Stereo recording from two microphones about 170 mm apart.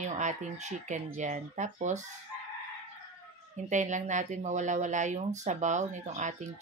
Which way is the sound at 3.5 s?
45° right (ahead or behind).